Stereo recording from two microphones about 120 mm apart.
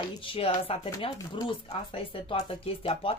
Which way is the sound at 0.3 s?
50° left (ahead or behind).